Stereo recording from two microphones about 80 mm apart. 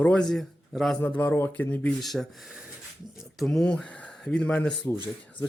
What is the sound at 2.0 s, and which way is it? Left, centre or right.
Speech, centre.